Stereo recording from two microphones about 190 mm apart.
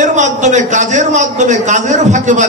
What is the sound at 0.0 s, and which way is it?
A man's voice, 40° right (ahead or behind).